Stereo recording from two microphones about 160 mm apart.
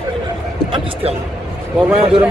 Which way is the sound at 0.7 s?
30° right (ahead or behind).